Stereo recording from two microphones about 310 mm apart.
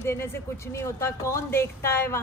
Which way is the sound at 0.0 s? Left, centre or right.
Centre.